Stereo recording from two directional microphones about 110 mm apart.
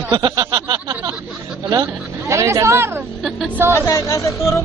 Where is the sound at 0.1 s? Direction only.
40° right (ahead or behind).